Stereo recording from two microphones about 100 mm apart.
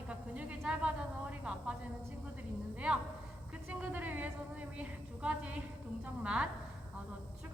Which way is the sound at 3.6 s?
15° right (ahead or behind).